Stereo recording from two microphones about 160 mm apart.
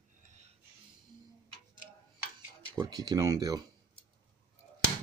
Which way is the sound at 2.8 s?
25° right (ahead or behind).